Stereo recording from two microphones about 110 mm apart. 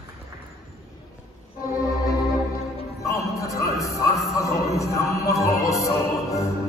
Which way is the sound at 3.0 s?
30° left (ahead or behind).